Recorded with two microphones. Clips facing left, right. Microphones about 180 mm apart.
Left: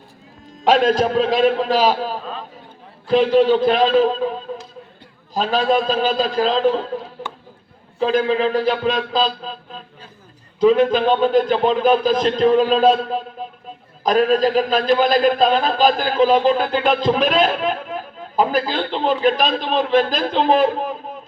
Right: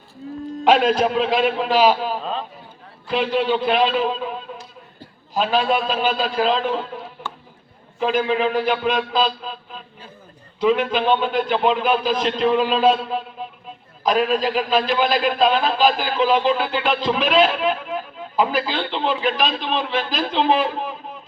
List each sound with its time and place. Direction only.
0.9 s speech: 40° left (ahead or behind)
7.9 s a man's voice: 35° left (ahead or behind)